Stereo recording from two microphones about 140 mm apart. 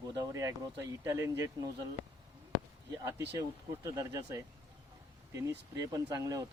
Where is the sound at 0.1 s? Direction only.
25° right (ahead or behind).